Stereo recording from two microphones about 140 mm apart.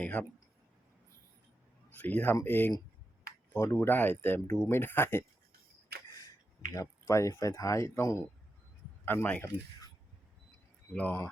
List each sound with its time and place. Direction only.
0.0 s speech: 10° left (ahead or behind)
1.9 s speech: 10° left (ahead or behind)
6.7 s speech: 20° left (ahead or behind)
10.9 s speech: 10° left (ahead or behind)